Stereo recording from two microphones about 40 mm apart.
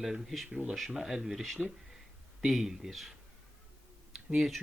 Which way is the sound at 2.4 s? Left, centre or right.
Centre.